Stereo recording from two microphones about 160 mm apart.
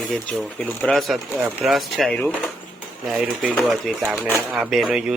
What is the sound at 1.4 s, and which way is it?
Speech, 10° right (ahead or behind).